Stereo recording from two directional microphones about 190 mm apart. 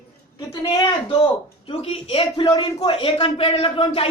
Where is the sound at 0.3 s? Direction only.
25° left (ahead or behind).